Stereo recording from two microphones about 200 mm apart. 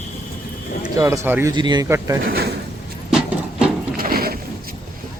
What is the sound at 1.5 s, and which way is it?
Speech, 20° right (ahead or behind).